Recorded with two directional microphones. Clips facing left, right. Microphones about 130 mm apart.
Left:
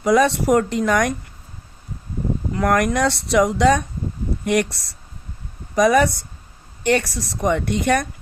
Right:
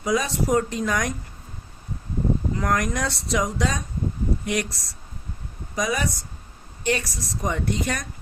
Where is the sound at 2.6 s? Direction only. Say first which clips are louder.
Left 10 dB; 65° left (ahead or behind).